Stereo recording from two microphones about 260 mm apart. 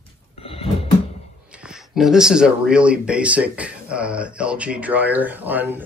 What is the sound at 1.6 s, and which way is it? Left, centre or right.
Speech, centre.